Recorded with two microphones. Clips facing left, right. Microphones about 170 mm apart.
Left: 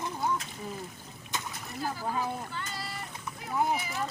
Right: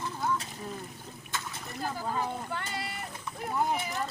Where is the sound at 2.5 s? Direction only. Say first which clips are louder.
Right 2 dB; 60° right (ahead or behind).